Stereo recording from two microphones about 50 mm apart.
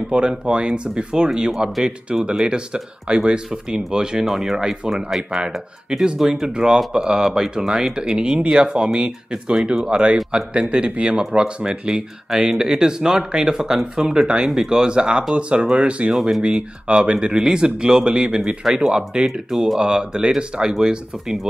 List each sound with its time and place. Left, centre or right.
0.1 s speech: right
1.9 s speech: centre
4.3 s speech: centre; by 16.1 s right
16.1 s speech: centre
16.4 s speech: centre
19.5 s speech: centre
19.8 s speech: centre